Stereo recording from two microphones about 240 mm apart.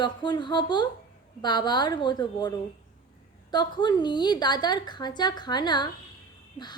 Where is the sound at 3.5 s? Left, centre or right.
Centre.